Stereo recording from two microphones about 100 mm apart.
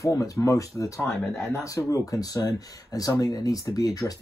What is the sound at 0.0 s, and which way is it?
Speech, 35° left (ahead or behind).